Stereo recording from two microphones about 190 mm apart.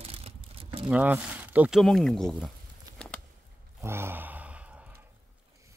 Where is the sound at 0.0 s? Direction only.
30° right (ahead or behind).